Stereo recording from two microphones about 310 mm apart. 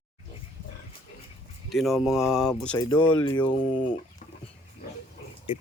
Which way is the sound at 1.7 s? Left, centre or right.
Centre.